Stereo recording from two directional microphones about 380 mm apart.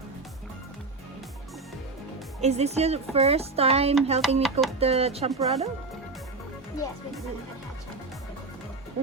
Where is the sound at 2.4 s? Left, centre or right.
Centre.